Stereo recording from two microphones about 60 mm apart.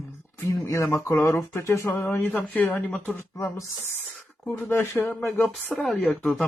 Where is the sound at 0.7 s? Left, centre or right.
Left.